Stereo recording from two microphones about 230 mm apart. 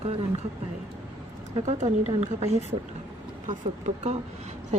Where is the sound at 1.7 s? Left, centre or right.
Right.